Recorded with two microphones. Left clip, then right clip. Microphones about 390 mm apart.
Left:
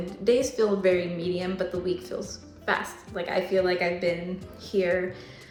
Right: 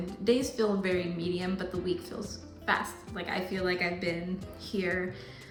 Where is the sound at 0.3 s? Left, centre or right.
Centre.